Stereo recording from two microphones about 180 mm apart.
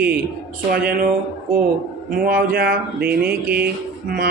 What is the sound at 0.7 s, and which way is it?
Speech, 55° right (ahead or behind).